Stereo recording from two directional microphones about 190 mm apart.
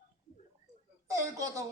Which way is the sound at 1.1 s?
15° right (ahead or behind).